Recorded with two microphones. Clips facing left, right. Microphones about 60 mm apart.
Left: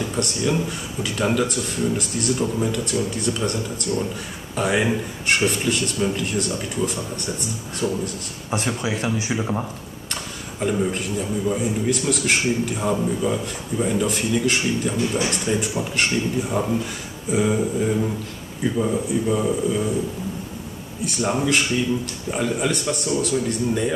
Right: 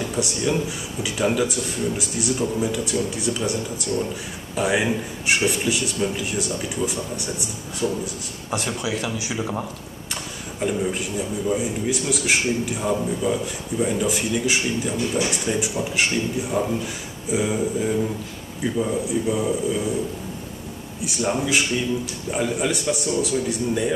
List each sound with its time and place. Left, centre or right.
0.0 s a sound: centre
0.5 s speech: centre
8.5 s speech: left
9.4 s speech: centre
10.6 s speech: centre
21.2 s speech: centre